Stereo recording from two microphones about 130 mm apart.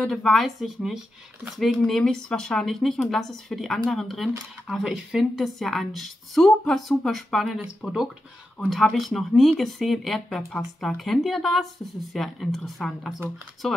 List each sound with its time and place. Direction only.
0.0 s speech: 5° left (ahead or behind)